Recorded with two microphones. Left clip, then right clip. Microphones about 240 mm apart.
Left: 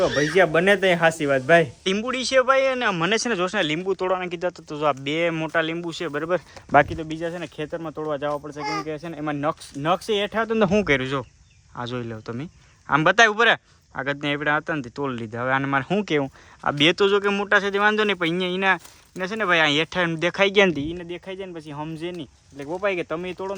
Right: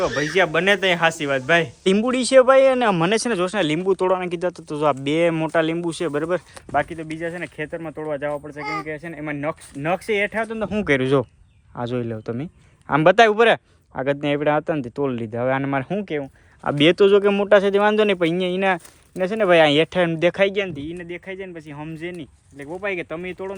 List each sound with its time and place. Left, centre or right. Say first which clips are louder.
0.0 s speech: left 1 dB; centre
6.8 s speech: even; centre
8.6 s speech: even; left
8.9 s speech: even; centre
10.8 s speech: right 4 dB; centre
16.0 s speech: left 3 dB; centre
16.6 s speech: right 3 dB; centre
20.8 s speech: even; centre